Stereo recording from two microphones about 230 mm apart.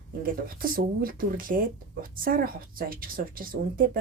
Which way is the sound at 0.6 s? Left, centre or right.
Right.